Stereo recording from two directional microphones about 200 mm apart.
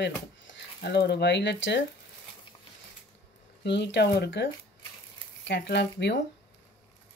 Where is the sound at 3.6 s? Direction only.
60° left (ahead or behind).